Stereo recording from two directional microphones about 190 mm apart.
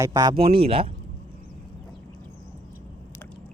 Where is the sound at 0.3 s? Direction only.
30° right (ahead or behind).